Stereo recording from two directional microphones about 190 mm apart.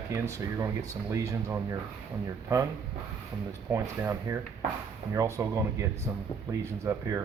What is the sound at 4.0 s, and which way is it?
Speech, 15° right (ahead or behind).